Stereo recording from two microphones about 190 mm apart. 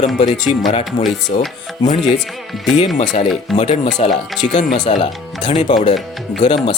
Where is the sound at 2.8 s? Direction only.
35° left (ahead or behind).